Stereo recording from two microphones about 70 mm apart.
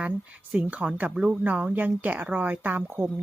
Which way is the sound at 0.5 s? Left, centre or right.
Centre.